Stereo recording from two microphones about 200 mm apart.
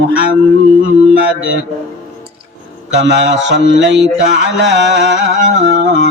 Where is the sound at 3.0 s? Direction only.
60° right (ahead or behind).